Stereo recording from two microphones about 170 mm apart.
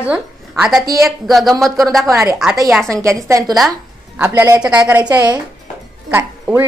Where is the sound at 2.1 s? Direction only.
15° right (ahead or behind).